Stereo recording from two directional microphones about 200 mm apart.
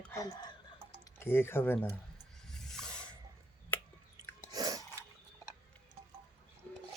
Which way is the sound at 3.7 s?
10° left (ahead or behind).